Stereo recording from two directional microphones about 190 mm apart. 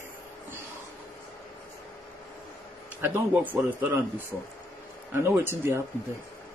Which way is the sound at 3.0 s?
10° right (ahead or behind).